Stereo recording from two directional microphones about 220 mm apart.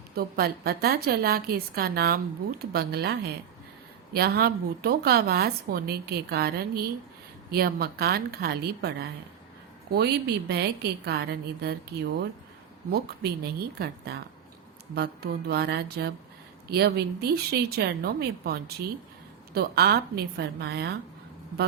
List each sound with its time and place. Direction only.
0.1 s a woman's voice: 45° right (ahead or behind)
12.9 s a woman's voice: 45° right (ahead or behind)